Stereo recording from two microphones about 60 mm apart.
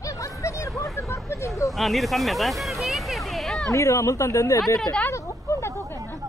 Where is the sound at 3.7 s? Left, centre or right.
Left.